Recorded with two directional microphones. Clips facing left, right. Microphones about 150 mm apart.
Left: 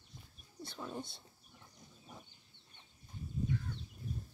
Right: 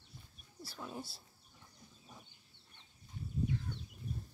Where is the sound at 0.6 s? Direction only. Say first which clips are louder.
Left 2 dB; 5° right (ahead or behind).